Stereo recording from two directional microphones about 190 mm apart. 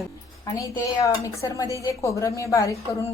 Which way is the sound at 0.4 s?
20° left (ahead or behind).